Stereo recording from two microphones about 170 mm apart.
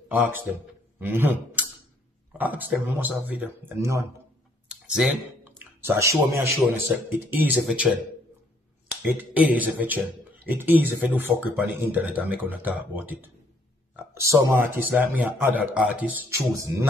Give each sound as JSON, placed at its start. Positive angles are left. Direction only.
{"t": 0.1, "sound": "a man's voice", "side_deg": -10}
{"t": 9.0, "sound": "speech", "side_deg": -10}
{"t": 14.5, "sound": "speech", "side_deg": -10}